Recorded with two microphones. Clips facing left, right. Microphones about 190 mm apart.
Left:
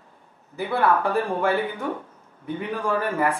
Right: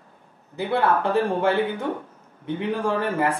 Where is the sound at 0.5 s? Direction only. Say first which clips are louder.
Even; 25° right (ahead or behind).